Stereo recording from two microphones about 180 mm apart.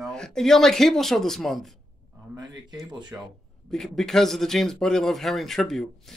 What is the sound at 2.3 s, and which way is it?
Speech, 20° right (ahead or behind).